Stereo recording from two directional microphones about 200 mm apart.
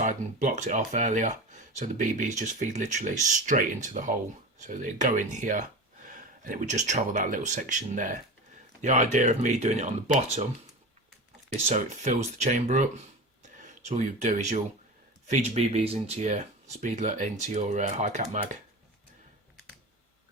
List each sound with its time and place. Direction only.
0.0 s speech: 40° right (ahead or behind)
11.5 s speech: 35° right (ahead or behind)